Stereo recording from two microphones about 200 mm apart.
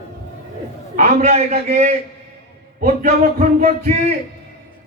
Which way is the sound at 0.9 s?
40° right (ahead or behind).